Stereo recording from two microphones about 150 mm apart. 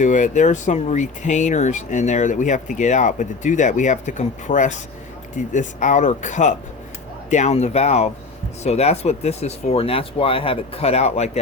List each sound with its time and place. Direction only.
0.0 s speech: 55° left (ahead or behind)